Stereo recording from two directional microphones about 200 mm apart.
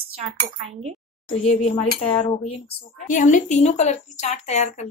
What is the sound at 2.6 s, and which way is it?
A woman's voice, 40° left (ahead or behind).